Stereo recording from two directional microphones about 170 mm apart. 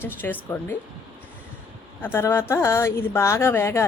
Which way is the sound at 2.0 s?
15° left (ahead or behind).